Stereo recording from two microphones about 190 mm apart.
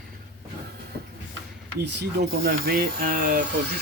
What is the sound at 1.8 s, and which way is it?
Speech, 60° right (ahead or behind).